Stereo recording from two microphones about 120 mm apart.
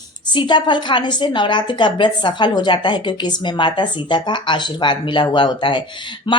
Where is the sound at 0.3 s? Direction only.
40° left (ahead or behind).